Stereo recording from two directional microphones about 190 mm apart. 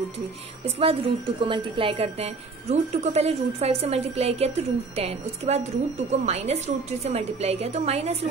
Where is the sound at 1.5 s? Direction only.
30° right (ahead or behind).